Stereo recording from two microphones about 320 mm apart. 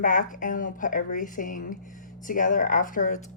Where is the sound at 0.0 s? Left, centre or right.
Left.